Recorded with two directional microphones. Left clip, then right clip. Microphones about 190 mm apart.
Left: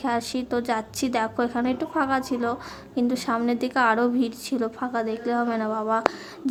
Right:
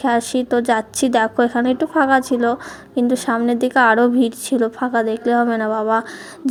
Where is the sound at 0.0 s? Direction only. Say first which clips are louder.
Right 8 dB; 25° right (ahead or behind).